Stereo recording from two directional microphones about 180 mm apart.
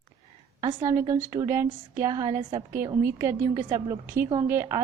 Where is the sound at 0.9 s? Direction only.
15° right (ahead or behind).